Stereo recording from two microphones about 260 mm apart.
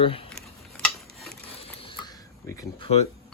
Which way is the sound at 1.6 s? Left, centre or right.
Left.